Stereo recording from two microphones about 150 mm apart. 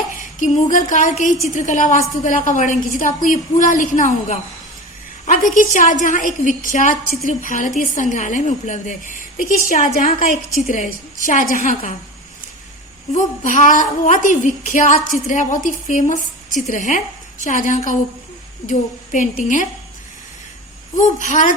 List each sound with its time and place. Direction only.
0.3 s a woman's voice: 60° left (ahead or behind)
13.1 s a woman's voice: 60° left (ahead or behind)
20.9 s a woman's voice: 55° left (ahead or behind)